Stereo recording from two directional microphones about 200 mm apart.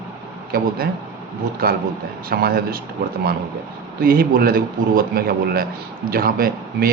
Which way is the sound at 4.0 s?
45° right (ahead or behind).